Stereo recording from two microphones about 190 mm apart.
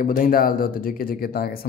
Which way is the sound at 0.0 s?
45° left (ahead or behind).